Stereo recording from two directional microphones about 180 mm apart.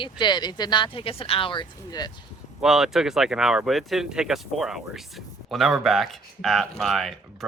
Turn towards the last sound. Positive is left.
turn(degrees=0)  # may be behind; listen again after turning